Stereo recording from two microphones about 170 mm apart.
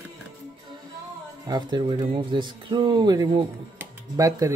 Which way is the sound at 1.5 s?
25° right (ahead or behind).